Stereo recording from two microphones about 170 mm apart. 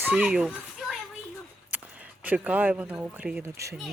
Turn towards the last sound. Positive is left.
turn(degrees=-5)  # may be behind; listen again after turning